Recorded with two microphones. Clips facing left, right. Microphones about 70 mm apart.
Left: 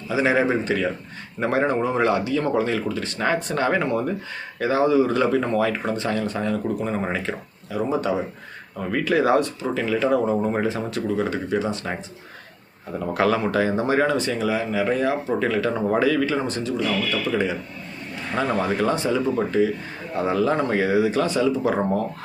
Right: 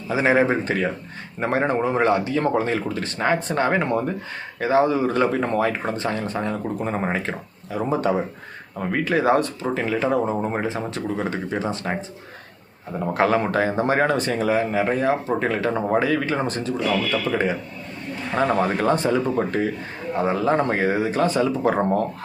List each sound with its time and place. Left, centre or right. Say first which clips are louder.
0.1 s speech: right 1 dB; right
13.1 s speech: right 1 dB; right
20.2 s speech: right 1 dB; right